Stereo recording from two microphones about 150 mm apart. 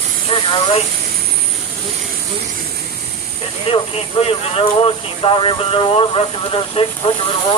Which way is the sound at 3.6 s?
40° left (ahead or behind).